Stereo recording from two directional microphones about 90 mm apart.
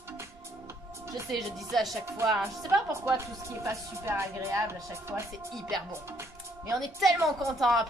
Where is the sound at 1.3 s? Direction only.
Centre (ahead or behind).